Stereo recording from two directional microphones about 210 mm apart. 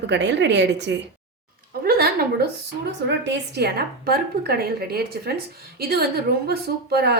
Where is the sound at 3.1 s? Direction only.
55° right (ahead or behind).